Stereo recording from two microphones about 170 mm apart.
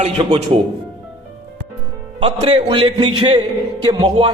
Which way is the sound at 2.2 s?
30° right (ahead or behind).